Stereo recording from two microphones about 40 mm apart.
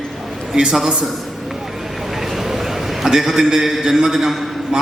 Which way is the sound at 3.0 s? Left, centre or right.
Centre.